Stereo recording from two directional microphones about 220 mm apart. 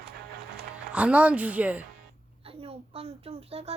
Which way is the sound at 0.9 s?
5° right (ahead or behind).